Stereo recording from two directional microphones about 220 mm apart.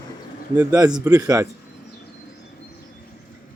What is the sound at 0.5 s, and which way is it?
Speech, 10° right (ahead or behind).